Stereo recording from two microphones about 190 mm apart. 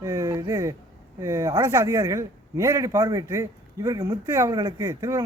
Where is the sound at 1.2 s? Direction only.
15° right (ahead or behind).